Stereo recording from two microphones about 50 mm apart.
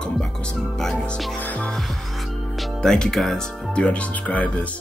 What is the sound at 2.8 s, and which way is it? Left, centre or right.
Speech, centre.